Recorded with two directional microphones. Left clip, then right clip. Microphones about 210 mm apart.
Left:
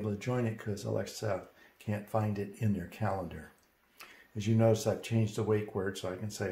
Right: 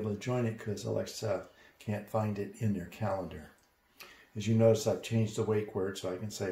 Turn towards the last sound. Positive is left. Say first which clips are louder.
# right 1 dB
turn(degrees=25)  # may be behind; listen again after turning